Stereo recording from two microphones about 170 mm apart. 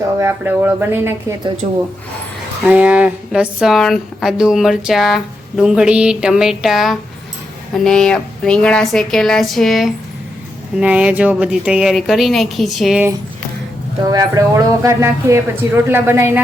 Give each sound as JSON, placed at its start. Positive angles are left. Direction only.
{"t": 0.2, "sound": "speech", "side_deg": -15}
{"t": 1.6, "sound": "speech", "side_deg": -45}
{"t": 2.6, "sound": "speech", "side_deg": -10}
{"t": 14.1, "sound": "speech", "side_deg": -20}